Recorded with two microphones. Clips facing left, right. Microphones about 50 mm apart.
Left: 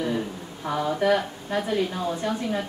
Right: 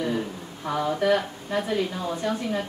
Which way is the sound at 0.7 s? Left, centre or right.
Centre.